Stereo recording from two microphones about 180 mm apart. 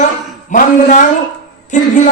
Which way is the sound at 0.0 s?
40° left (ahead or behind).